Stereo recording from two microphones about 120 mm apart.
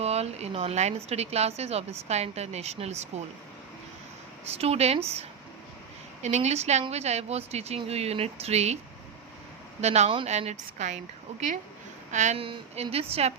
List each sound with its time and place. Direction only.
0.0 s a woman's voice: 60° right (ahead or behind)
4.4 s a woman's voice: 60° right (ahead or behind)
6.2 s a woman's voice: 70° right (ahead or behind)
9.8 s a woman's voice: 65° right (ahead or behind); by 12.4 s 85° right
12.4 s a woman's voice: 55° right (ahead or behind)